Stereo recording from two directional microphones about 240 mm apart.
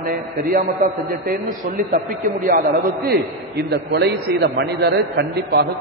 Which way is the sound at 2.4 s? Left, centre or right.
Right.